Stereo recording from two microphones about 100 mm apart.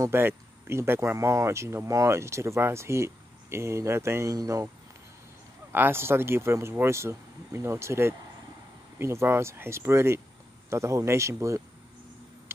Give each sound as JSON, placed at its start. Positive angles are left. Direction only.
{"t": 0.0, "sound": "speech", "side_deg": -25}
{"t": 5.7, "sound": "speech", "side_deg": -20}